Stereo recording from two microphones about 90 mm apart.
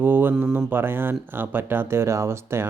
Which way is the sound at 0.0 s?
25° right (ahead or behind).